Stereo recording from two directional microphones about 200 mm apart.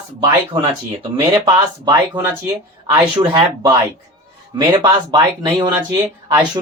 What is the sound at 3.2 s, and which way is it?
Speech, 25° right (ahead or behind).